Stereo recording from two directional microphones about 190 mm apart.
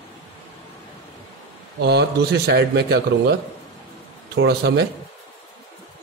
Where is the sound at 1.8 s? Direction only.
60° right (ahead or behind).